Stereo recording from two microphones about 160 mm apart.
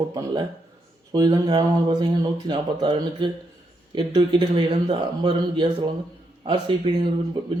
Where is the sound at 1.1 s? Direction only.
25° right (ahead or behind).